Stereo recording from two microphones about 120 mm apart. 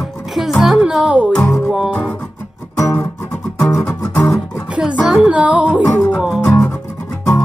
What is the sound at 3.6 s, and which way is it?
Music, 30° left (ahead or behind).